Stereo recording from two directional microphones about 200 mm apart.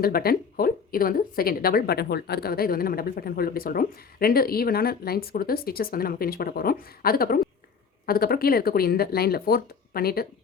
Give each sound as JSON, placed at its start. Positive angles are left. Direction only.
{"t": 0.0, "sound": "speech", "side_deg": 50}